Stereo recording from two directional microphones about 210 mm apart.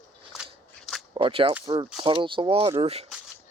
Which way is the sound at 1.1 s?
25° right (ahead or behind).